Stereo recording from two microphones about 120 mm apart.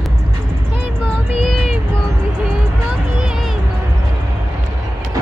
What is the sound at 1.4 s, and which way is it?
Child singing, 5° left (ahead or behind).